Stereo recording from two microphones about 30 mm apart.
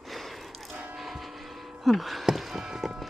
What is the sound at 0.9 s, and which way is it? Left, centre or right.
Music, centre.